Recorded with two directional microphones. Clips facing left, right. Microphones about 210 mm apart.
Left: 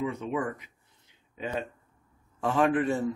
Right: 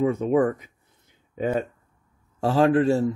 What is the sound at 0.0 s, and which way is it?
Speech, 45° right (ahead or behind).